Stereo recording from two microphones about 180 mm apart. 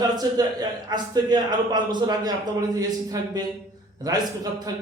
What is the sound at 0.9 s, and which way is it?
A man's voice, 25° right (ahead or behind).